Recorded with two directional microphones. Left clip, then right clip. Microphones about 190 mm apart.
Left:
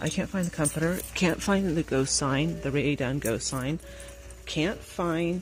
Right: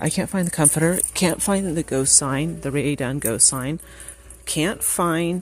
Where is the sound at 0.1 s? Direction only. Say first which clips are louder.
Right 6 dB; 30° right (ahead or behind).